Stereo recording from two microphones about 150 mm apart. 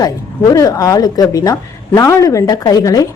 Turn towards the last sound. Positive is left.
turn(degrees=25)  # may be behind; listen again after turning